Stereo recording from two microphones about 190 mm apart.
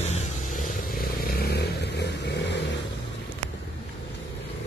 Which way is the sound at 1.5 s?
60° left (ahead or behind).